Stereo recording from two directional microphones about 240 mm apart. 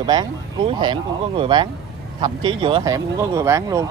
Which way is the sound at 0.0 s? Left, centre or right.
Centre.